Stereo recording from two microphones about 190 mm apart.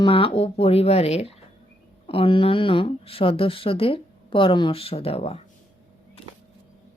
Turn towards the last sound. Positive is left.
turn(degrees=30)  # may be behind; listen again after turning